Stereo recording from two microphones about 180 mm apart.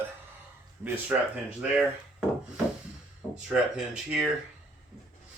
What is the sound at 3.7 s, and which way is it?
Speech, 5° right (ahead or behind).